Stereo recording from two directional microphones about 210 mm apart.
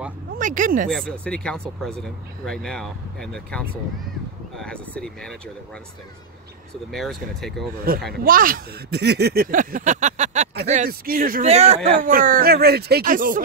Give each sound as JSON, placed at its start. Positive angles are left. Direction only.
{"t": 0.4, "sound": "speech", "side_deg": -40}
{"t": 0.8, "sound": "speech", "side_deg": 5}
{"t": 6.9, "sound": "speech", "side_deg": 0}
{"t": 7.9, "sound": "speech", "side_deg": -45}